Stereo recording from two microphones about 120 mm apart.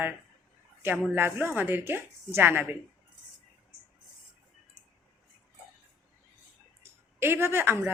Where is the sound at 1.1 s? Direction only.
15° right (ahead or behind).